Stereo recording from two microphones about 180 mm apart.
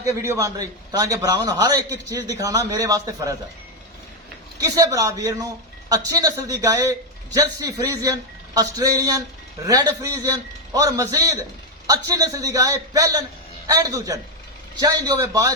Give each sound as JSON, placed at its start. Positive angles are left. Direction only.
{"t": 0.0, "sound": "a man's voice", "side_deg": -15}
{"t": 4.6, "sound": "a man's voice", "side_deg": -20}